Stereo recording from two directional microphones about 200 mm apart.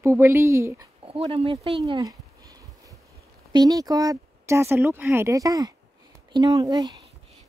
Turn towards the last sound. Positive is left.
turn(degrees=-20)  # may be behind; listen again after turning